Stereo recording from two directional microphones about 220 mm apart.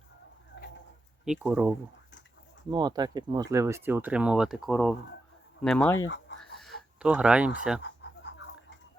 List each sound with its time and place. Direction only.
0.5 s bird: 50° left (ahead or behind)
1.2 s speech: 5° right (ahead or behind)
2.6 s speech: 20° right (ahead or behind); by 6.1 s 10° left (ahead or behind)
6.4 s chicken: centre (ahead or behind)
7.8 s a sound: 50° left (ahead or behind)